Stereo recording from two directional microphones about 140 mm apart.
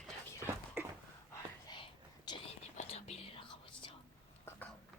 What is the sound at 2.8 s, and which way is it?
Whispering, 50° left (ahead or behind).